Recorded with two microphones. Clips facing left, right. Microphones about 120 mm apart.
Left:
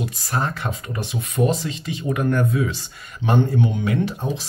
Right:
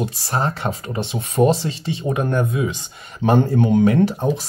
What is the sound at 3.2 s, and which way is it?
Speech, 40° right (ahead or behind).